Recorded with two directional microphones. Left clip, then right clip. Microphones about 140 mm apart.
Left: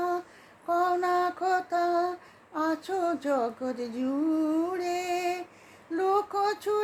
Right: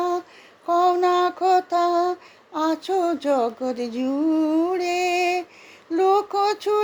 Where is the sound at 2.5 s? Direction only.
35° right (ahead or behind).